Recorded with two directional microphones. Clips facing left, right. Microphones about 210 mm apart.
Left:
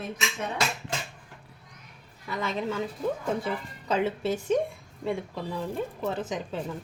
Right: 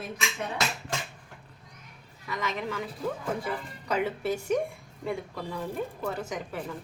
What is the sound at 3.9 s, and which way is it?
Speech, 25° left (ahead or behind).